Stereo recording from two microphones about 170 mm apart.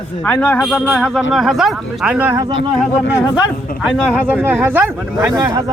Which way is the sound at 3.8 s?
5° right (ahead or behind).